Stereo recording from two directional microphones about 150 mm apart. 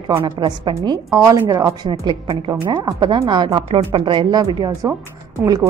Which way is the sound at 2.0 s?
35° right (ahead or behind).